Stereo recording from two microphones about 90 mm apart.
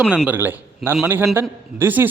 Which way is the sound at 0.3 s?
25° right (ahead or behind).